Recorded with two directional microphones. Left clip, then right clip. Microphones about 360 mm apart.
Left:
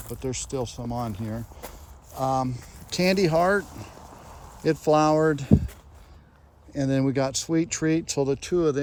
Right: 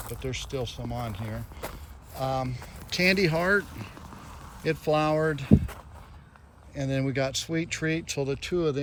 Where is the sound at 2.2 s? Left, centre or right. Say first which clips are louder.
Left 4 dB; centre.